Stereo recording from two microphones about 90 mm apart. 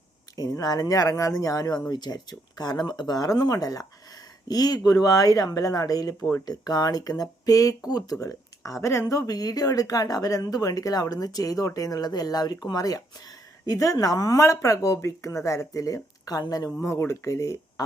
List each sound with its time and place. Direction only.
0.3 s speech: 45° left (ahead or behind)
8.2 s a sound: 40° left (ahead or behind)
8.8 s speech: 35° left (ahead or behind)
16.8 s speech: 30° left (ahead or behind)